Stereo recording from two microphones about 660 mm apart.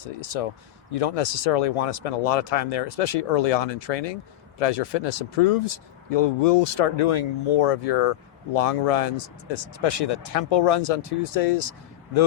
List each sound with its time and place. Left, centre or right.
0.4 s speech: left
10.3 s speech: left